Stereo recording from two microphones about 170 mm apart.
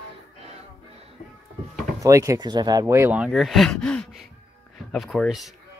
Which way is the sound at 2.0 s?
20° right (ahead or behind).